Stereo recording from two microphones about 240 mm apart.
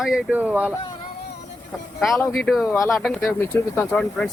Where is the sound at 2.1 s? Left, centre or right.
Centre.